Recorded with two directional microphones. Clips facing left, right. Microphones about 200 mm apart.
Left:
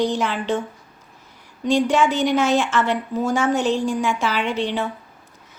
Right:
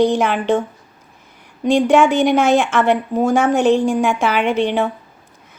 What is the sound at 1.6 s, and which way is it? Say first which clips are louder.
A woman's voice: right 5 dB; 55° right (ahead or behind).